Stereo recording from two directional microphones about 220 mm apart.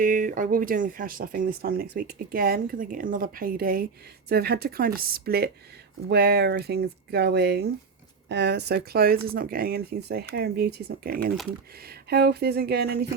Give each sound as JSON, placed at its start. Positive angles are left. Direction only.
{"t": 0.0, "sound": "speech", "side_deg": -35}